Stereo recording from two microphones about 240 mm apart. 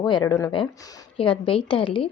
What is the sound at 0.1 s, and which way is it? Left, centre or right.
A woman's voice, centre.